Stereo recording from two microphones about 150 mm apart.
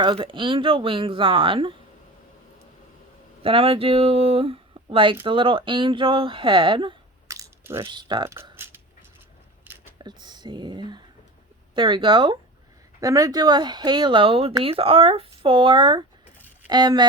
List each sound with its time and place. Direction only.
0.0 s speech: 35° right (ahead or behind)
3.4 s speech: 40° right (ahead or behind)
7.3 s a sound: 20° right (ahead or behind)
7.9 s speech: 30° right (ahead or behind)
8.5 s dog: 15° right (ahead or behind)
10.0 s speech: 30° right (ahead or behind)